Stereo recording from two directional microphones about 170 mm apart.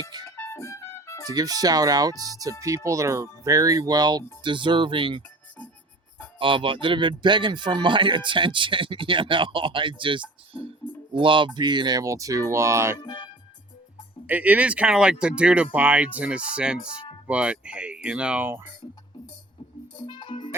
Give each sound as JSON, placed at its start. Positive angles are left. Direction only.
{"t": 0.3, "sound": "music", "side_deg": 15}
{"t": 1.4, "sound": "speech", "side_deg": -20}
{"t": 6.4, "sound": "speech", "side_deg": -30}
{"t": 13.1, "sound": "music", "side_deg": 25}
{"t": 14.3, "sound": "speech", "side_deg": -10}
{"t": 20.1, "sound": "music", "side_deg": 30}